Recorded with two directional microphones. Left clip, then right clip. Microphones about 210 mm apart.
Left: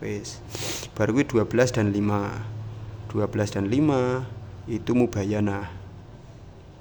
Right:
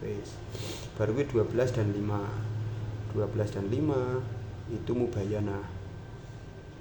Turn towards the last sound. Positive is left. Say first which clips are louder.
# left 6 dB
turn(degrees=40)  # may be behind; listen again after turning